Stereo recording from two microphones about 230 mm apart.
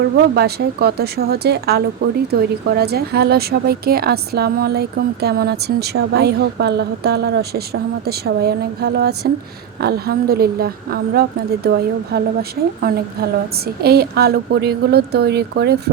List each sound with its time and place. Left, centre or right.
0.0 s a woman's voice: right